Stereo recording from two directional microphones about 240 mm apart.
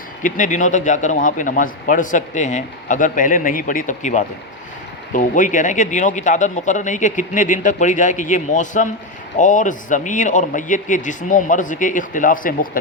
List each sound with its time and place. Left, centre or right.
0.2 s a man's voice: left